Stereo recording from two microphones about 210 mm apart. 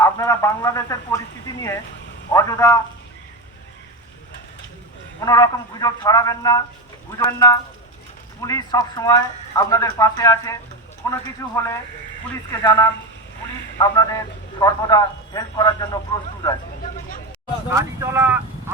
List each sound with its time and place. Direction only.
0.0 s a man's voice: 15° left (ahead or behind)
5.2 s speech: 15° left (ahead or behind)
17.7 s speech: 10° right (ahead or behind)